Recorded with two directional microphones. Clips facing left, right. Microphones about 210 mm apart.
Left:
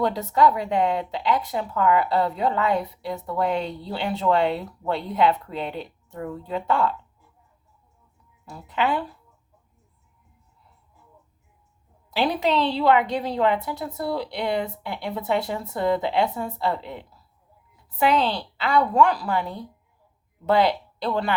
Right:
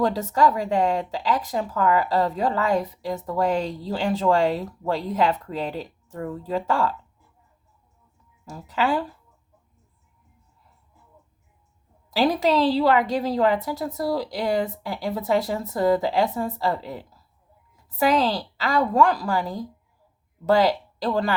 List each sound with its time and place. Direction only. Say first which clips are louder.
0.0 s a woman's voice: even; 35° right (ahead or behind)
8.4 s a woman's voice: right 1 dB; 40° right (ahead or behind)
12.1 s a woman's voice: right 2 dB; 40° right (ahead or behind)
19.3 s a woman's voice: right 1 dB; 35° right (ahead or behind)